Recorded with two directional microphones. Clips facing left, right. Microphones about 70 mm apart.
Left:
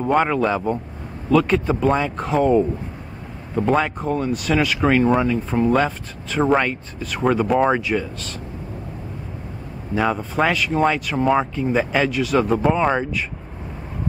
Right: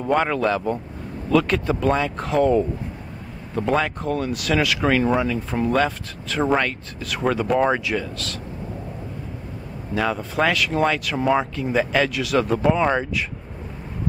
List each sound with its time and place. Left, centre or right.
0.0 s speech: centre
9.9 s speech: centre